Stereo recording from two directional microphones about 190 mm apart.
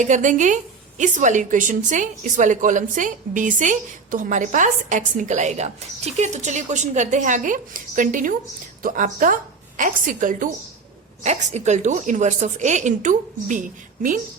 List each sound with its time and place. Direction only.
0.0 s a woman's voice: 40° right (ahead or behind)